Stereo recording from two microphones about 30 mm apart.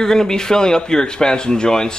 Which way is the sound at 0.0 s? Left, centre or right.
Centre.